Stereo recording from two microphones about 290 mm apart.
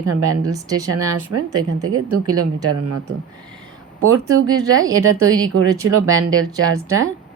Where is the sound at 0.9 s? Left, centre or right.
Right.